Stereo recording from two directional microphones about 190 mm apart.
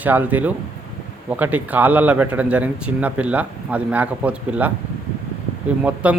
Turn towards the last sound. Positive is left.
turn(degrees=-5)  # may be behind; listen again after turning